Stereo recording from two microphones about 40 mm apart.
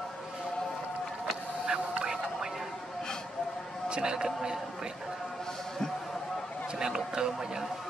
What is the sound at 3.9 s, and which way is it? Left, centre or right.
Speech, right.